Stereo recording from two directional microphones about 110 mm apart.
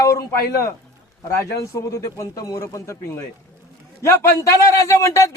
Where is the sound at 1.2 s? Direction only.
30° left (ahead or behind).